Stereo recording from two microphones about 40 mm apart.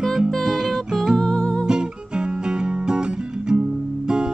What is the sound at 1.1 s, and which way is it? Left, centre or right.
Music, left.